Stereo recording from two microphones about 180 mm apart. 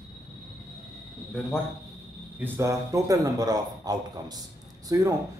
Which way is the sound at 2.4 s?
15° right (ahead or behind).